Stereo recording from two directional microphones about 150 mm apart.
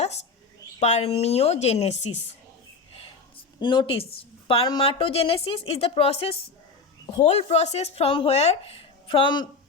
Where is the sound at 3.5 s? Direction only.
30° left (ahead or behind).